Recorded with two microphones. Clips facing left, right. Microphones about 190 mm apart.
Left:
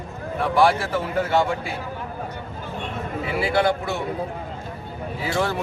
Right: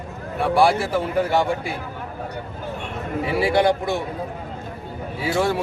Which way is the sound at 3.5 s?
15° right (ahead or behind).